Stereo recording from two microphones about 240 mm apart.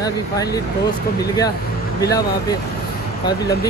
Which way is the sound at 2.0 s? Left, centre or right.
Centre.